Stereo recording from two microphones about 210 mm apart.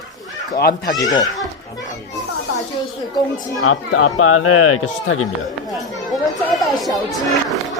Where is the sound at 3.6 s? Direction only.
90° left.